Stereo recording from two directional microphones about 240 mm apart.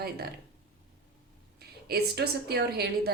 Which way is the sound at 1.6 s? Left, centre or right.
Right.